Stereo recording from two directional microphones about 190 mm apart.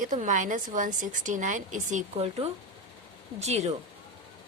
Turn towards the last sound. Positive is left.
turn(degrees=-35)  # may be behind; listen again after turning